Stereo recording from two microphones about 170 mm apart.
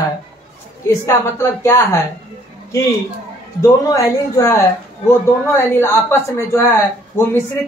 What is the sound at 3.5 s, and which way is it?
Speech, 20° left (ahead or behind).